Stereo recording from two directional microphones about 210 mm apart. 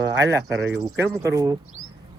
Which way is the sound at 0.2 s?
15° right (ahead or behind).